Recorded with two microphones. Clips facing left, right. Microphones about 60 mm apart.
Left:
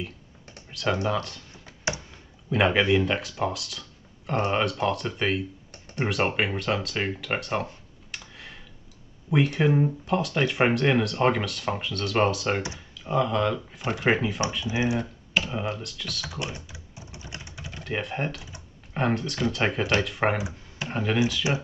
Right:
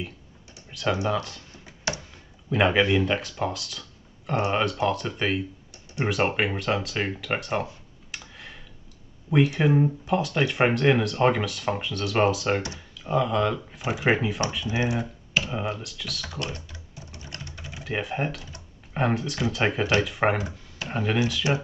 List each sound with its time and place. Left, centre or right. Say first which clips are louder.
0.7 s speech: even; centre
8.1 s a sound: even; centre
9.3 s speech: right 1 dB; centre
16.5 s typing: even; centre
17.3 s a sound: right 1 dB; centre
17.6 s typing: right 1 dB; centre
18.9 s speech: even; centre
21.4 s speech: right 2 dB; centre